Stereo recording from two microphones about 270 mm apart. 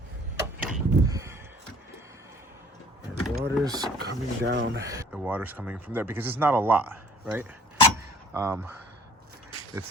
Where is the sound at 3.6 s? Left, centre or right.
Centre.